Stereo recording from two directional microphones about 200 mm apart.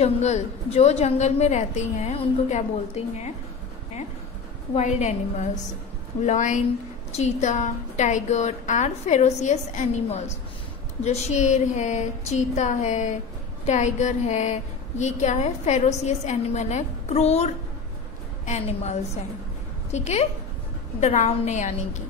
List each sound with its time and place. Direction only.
0.0 s a woman's voice: 35° left (ahead or behind)
4.7 s a woman's voice: 35° left (ahead or behind)